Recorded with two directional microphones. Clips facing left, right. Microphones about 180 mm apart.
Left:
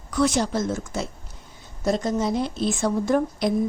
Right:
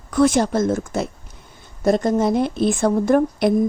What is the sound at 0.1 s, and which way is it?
A woman's voice, 55° right (ahead or behind).